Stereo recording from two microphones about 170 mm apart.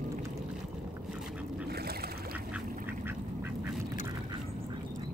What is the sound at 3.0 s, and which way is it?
Duck, 10° right (ahead or behind).